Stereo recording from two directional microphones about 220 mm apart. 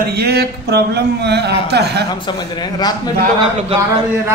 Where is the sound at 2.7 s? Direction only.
15° left (ahead or behind).